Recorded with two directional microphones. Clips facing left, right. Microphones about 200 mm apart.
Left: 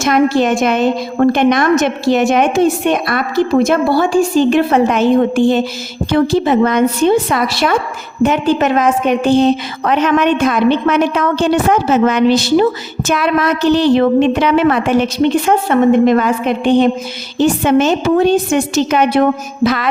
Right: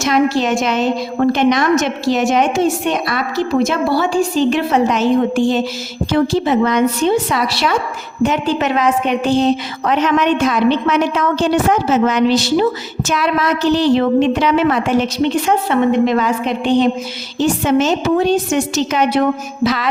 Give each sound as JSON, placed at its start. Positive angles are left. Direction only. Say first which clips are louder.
{"t": 0.0, "sound": "a woman's voice", "louder": "left 3 dB", "side_deg": 55}